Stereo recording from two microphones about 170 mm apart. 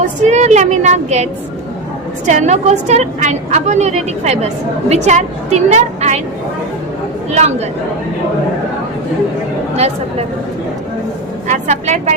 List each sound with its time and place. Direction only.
0.0 s a woman's voice: 45° right (ahead or behind)
11.4 s speech: 45° right (ahead or behind)